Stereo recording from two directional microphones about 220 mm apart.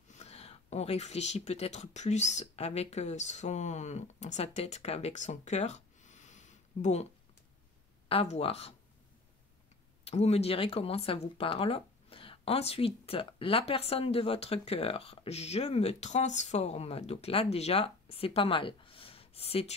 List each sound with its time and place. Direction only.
0.1 s speech: 30° left (ahead or behind)
8.1 s speech: 25° left (ahead or behind)
10.0 s speech: 30° left (ahead or behind)